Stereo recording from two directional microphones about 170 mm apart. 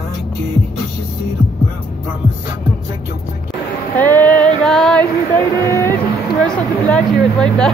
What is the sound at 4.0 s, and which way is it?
Female singing, 10° left (ahead or behind).